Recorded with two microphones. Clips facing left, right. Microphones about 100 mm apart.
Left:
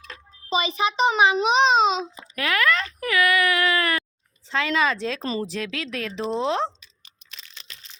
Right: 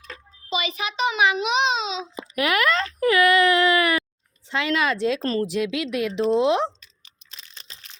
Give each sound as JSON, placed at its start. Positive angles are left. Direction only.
{"t": 0.1, "sound": "a child's voice", "side_deg": 30}
{"t": 2.3, "sound": "a sound", "side_deg": -20}
{"t": 4.4, "sound": "speech", "side_deg": -10}
{"t": 5.2, "sound": "speech", "side_deg": 5}
{"t": 5.5, "sound": "speech", "side_deg": -10}
{"t": 7.3, "sound": "a sound", "side_deg": -35}